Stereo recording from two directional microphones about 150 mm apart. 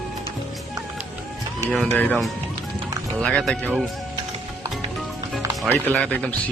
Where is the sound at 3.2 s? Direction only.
5° left (ahead or behind).